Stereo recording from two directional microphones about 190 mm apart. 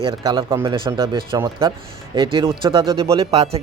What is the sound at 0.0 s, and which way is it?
Speech, 25° right (ahead or behind).